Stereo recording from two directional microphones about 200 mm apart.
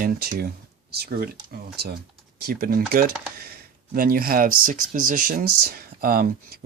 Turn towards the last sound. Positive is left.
turn(degrees=-45)  # may be behind; listen again after turning